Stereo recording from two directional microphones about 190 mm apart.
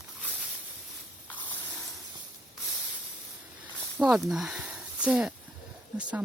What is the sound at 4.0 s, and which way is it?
Speech, centre (ahead or behind).